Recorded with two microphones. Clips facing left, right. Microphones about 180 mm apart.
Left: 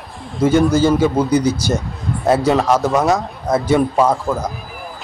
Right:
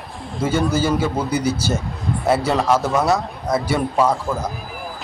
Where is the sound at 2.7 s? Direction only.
15° left (ahead or behind).